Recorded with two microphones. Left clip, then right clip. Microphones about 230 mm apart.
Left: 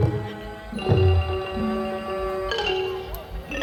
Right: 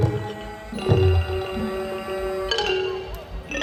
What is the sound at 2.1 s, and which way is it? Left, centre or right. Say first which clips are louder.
Music: right 3 dB; right.